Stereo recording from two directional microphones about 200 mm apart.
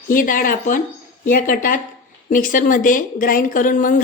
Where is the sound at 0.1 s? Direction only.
45° left (ahead or behind).